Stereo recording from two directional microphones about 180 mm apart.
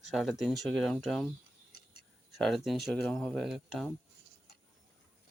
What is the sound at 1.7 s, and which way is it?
Scissors, 60° left (ahead or behind).